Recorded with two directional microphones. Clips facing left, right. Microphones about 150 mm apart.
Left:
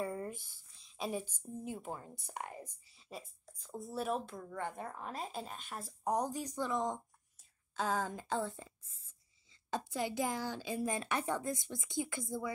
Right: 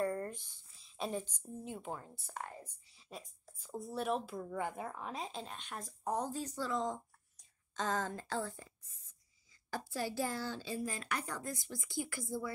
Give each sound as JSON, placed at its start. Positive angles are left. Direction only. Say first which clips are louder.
{"t": 0.0, "sound": "a sound", "louder": "right 3 dB", "side_deg": 5}
{"t": 1.6, "sound": "a woman's voice", "louder": "left 1 dB", "side_deg": 5}
{"t": 2.1, "sound": "a woman's voice", "louder": "left 1 dB", "side_deg": 15}
{"t": 2.9, "sound": "speech", "louder": "right 1 dB", "side_deg": 0}
{"t": 4.4, "sound": "a woman's voice", "louder": "right 2 dB", "side_deg": -10}
{"t": 7.3, "sound": "a woman's voice", "louder": "left 2 dB", "side_deg": 10}